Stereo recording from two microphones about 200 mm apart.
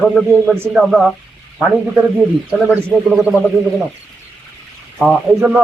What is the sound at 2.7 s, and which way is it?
Speech, 5° right (ahead or behind).